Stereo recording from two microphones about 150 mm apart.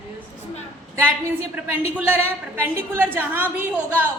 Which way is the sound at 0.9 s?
15° right (ahead or behind).